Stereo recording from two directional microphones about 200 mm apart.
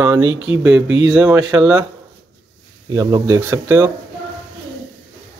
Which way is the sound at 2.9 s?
15° right (ahead or behind).